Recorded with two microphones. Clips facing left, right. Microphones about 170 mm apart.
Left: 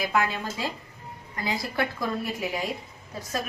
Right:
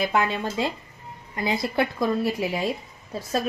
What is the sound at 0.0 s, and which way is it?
Speech, 25° right (ahead or behind).